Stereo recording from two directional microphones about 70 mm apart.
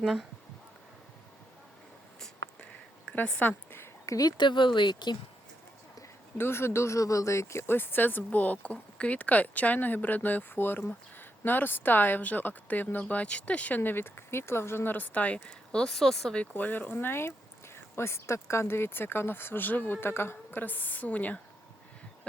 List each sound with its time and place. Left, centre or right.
0.0 s speech: centre
3.2 s a woman's voice: left
4.0 s speech: left
4.3 s speech: left
6.3 s speech: left; by 16.3 s centre
16.3 s speech: centre